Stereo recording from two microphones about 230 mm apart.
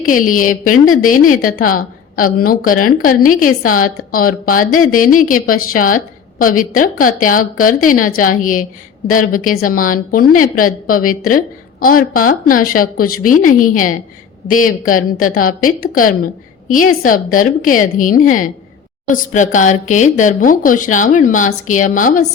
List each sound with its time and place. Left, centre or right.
0.3 s a woman's voice: left